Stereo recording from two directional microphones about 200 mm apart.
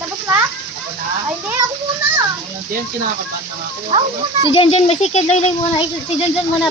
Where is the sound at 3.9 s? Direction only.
30° right (ahead or behind).